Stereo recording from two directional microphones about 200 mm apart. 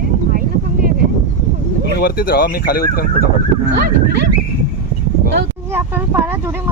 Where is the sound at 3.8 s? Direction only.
55° right (ahead or behind).